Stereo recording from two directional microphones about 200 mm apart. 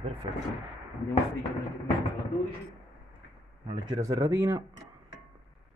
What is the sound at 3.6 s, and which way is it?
Speech, 25° right (ahead or behind).